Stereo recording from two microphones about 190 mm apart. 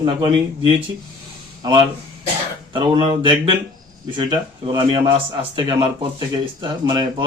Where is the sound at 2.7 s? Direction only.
25° right (ahead or behind).